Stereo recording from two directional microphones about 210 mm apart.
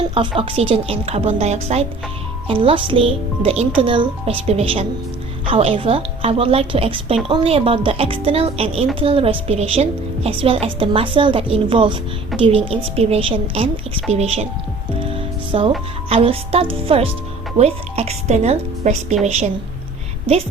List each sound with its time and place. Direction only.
0.1 s speech: 25° right (ahead or behind)
15.5 s a woman's voice: 25° right (ahead or behind)